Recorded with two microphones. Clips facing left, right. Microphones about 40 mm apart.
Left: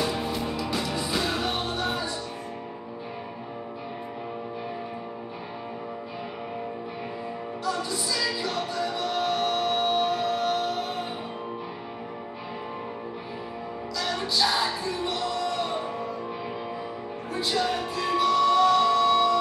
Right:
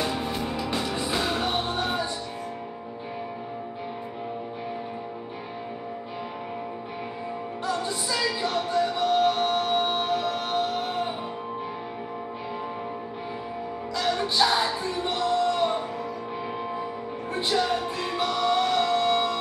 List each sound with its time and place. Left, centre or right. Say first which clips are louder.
0.1 s music: even; right
7.6 s music: even; right
13.9 s music: right 3 dB; right
17.3 s music: right 2 dB; right